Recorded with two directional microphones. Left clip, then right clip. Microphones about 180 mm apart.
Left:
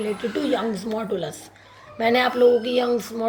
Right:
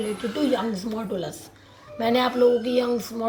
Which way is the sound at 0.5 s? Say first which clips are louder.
Left 2 dB; 30° left (ahead or behind).